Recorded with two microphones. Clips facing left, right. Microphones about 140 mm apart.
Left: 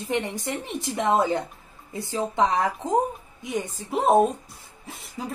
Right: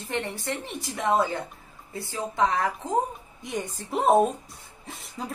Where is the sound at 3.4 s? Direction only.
Centre (ahead or behind).